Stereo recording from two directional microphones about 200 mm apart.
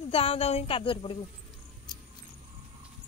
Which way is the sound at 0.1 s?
30° left (ahead or behind).